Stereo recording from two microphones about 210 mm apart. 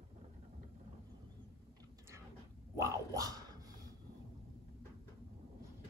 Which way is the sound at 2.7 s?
15° right (ahead or behind).